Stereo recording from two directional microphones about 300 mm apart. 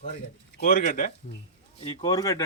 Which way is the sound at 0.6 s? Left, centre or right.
Left.